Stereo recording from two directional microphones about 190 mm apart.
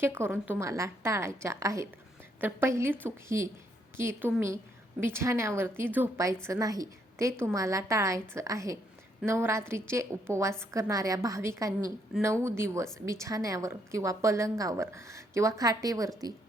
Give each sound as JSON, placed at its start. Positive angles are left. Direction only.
{"t": 0.0, "sound": "a woman's voice", "side_deg": -10}